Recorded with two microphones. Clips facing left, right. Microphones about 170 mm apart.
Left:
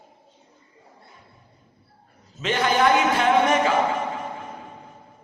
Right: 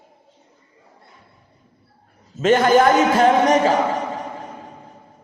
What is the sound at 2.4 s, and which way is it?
A man's voice, 45° right (ahead or behind).